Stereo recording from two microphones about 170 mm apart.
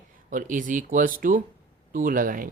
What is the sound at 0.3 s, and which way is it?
Speech, 50° right (ahead or behind).